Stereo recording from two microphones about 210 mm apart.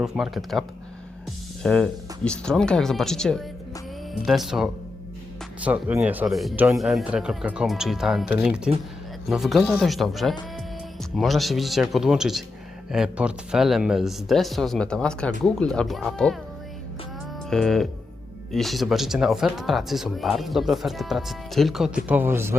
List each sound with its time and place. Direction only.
0.0 s speech: centre (ahead or behind)
1.6 s speech: 5° left (ahead or behind)
17.5 s speech: centre (ahead or behind)